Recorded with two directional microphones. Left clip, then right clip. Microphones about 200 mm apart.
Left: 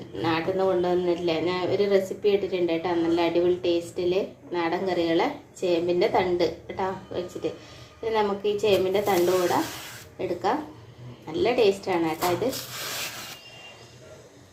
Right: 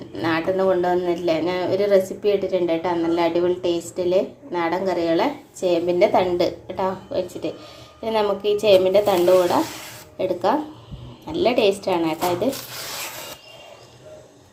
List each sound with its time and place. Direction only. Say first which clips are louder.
0.2 s speech: right 4 dB; 30° right (ahead or behind)